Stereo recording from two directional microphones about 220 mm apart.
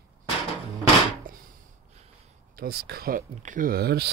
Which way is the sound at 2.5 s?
45° right (ahead or behind).